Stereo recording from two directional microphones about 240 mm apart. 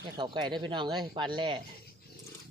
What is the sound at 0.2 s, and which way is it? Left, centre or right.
Speech, centre.